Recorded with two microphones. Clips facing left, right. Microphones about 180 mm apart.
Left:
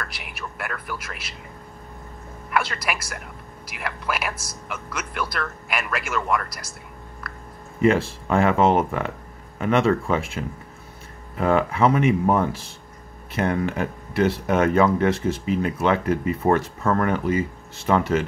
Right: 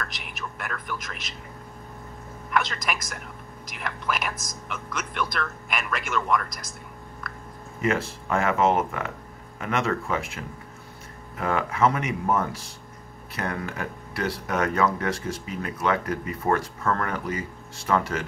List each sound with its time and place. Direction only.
0.0 s speech: 10° left (ahead or behind)
2.5 s a man's voice: 5° left (ahead or behind)
7.8 s speech: 30° left (ahead or behind)